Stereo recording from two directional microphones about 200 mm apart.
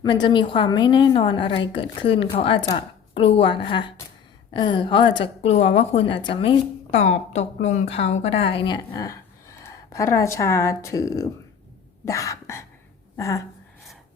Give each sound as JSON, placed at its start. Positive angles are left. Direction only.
{"t": 0.0, "sound": "a woman's voice", "side_deg": 20}
{"t": 12.0, "sound": "cough", "side_deg": 15}
{"t": 13.1, "sound": "speech", "side_deg": 15}